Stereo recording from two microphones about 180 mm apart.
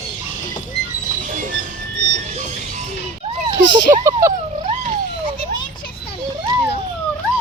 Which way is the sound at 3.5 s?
20° right (ahead or behind).